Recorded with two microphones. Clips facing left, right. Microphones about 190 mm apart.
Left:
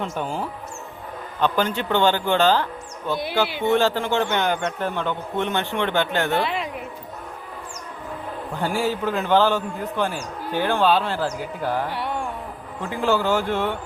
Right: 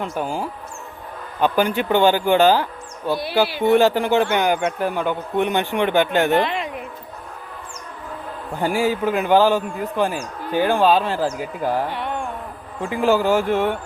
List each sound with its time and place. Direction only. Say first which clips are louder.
0.2 s a man's voice: right 2 dB; 5° right (ahead or behind)
3.7 s a man's voice: right 5 dB; 15° right (ahead or behind)
6.5 s a sound: right 1 dB; 5° left (ahead or behind)
8.5 s a man's voice: right 4 dB; 15° right (ahead or behind)
11.9 s carnatic music: right 1 dB; 10° left (ahead or behind)
12.8 s a man's voice: right 4 dB; 15° right (ahead or behind)